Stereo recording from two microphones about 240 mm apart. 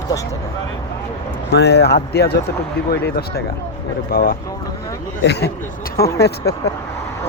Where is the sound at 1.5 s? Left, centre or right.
Left.